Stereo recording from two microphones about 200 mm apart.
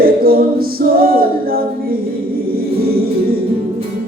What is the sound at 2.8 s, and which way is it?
Music, 50° right (ahead or behind).